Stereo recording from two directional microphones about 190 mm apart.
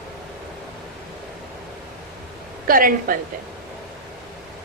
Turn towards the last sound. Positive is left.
turn(degrees=-45)  # may be behind; listen again after turning